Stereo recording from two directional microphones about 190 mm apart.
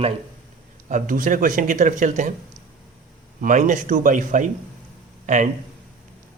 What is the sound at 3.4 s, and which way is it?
Speech, 40° right (ahead or behind).